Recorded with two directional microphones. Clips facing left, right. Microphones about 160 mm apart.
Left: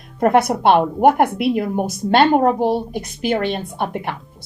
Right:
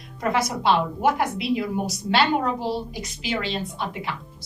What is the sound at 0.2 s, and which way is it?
A woman's voice, 55° left (ahead or behind).